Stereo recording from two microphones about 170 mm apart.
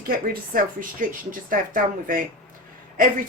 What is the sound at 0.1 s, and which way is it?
A woman's voice, 55° right (ahead or behind).